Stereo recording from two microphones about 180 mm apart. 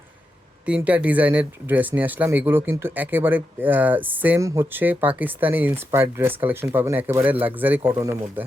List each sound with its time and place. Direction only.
0.6 s speech: 5° right (ahead or behind)